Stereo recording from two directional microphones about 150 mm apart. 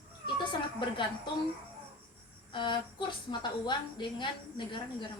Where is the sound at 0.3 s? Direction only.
30° left (ahead or behind).